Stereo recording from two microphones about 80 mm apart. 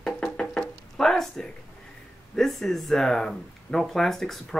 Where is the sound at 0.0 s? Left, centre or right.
Centre.